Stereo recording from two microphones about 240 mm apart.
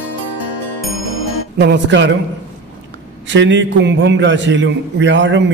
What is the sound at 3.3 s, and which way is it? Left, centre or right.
A man's voice, right.